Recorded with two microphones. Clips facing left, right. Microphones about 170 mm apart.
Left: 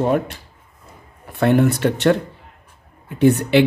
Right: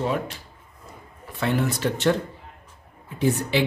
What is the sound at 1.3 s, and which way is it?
Speech, 55° left (ahead or behind).